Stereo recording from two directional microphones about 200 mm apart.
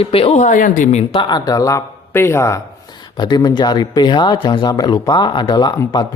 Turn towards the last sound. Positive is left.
turn(degrees=20)  # may be behind; listen again after turning